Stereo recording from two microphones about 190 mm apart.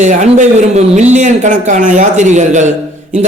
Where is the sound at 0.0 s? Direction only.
40° right (ahead or behind).